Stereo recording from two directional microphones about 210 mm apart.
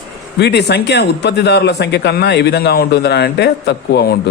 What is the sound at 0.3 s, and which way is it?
A man's voice, 55° left (ahead or behind).